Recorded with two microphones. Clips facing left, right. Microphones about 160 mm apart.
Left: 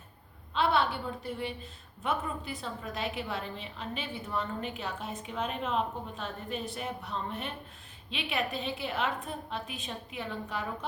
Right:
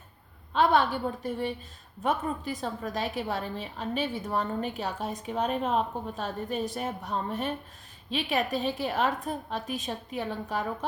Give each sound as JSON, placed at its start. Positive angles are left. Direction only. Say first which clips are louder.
{"t": 0.5, "sound": "a woman's voice", "louder": "right 4 dB", "side_deg": -45}